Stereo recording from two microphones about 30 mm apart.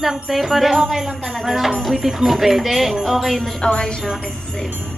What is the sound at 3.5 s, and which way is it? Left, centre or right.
Speech, left.